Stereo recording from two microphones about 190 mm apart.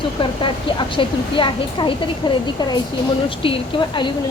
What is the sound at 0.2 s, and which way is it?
A woman's voice, 25° left (ahead or behind).